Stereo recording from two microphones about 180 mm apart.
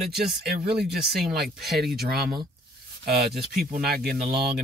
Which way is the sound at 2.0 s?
60° right (ahead or behind).